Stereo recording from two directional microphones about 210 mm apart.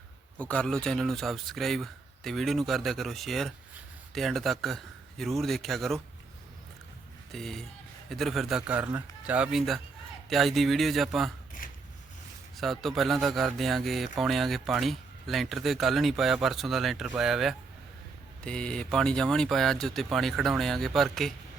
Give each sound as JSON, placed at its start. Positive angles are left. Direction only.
{"t": 0.3, "sound": "speech", "side_deg": 5}
{"t": 7.3, "sound": "speech", "side_deg": 0}
{"t": 11.6, "sound": "a sound", "side_deg": 40}
{"t": 12.5, "sound": "speech", "side_deg": 0}